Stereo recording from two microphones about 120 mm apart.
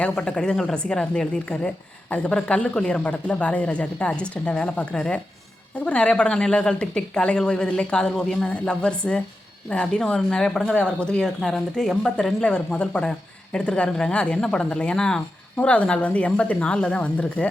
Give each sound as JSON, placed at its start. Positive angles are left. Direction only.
{"t": 0.0, "sound": "speech", "side_deg": 10}